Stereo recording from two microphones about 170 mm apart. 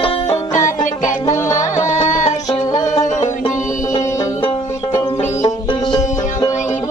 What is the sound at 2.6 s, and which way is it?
Music, 20° left (ahead or behind).